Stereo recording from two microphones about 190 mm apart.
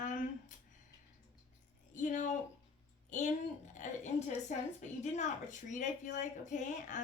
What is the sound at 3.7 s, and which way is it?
A woman's voice, 40° left (ahead or behind).